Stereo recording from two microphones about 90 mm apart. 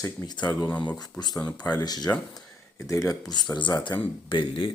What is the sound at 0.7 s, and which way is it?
Speech, 15° left (ahead or behind).